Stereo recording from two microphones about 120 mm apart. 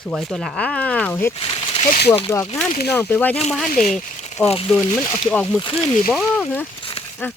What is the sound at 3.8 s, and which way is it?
Speech, 80° left.